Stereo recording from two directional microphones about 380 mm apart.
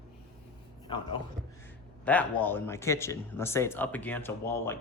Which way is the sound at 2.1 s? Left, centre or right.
Centre.